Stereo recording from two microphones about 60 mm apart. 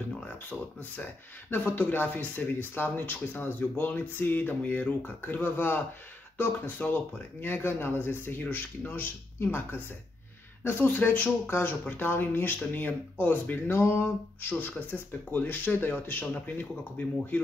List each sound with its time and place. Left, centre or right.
0.5 s speech: left